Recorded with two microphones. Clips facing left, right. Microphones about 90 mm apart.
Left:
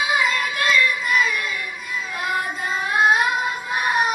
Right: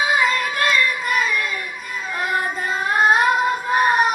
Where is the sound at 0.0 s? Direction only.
45° right (ahead or behind).